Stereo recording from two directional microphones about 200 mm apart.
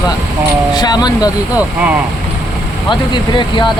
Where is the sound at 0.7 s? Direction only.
20° left (ahead or behind).